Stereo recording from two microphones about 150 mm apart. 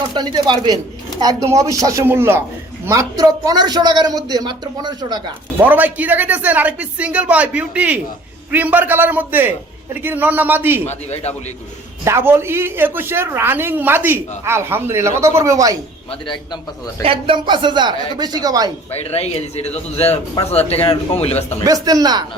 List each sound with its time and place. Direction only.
0.2 s a man's voice: 30° right (ahead or behind)
5.5 s speech: 10° right (ahead or behind)
10.8 s a man's voice: 45° left (ahead or behind)
12.0 s speech: 15° right (ahead or behind)
16.2 s a man's voice: 30° left (ahead or behind)
17.0 s speech: 35° right (ahead or behind)
18.9 s a man's voice: 45° left (ahead or behind)
21.6 s a man's voice: 25° right (ahead or behind)